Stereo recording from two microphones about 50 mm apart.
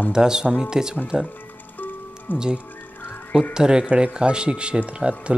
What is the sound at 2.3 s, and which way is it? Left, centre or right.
Speech, left.